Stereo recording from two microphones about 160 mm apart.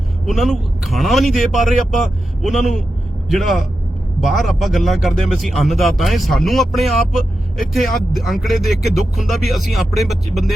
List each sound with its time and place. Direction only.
0.3 s speech: centre (ahead or behind)